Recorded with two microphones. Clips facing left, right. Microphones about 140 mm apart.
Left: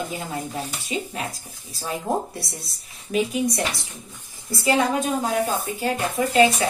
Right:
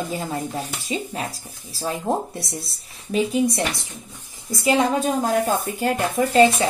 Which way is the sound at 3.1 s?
25° right (ahead or behind).